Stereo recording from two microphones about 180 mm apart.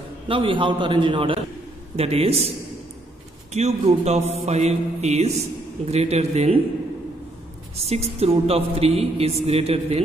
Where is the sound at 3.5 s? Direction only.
35° right (ahead or behind).